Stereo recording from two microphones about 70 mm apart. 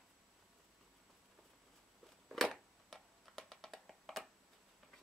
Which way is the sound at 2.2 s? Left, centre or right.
Centre.